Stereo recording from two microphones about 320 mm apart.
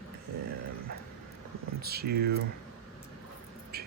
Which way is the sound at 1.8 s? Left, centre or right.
Right.